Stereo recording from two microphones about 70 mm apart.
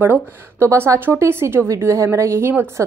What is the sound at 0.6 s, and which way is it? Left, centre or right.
A woman's voice, right.